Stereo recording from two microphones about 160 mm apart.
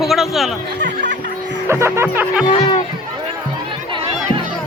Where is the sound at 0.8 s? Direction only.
90° right.